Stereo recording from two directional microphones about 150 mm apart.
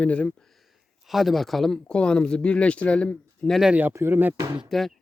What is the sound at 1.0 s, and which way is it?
Speech, centre (ahead or behind).